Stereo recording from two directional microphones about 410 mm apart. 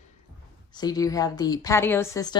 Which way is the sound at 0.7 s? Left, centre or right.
Centre.